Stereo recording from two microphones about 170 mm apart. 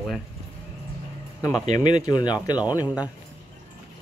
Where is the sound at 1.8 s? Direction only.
25° left (ahead or behind).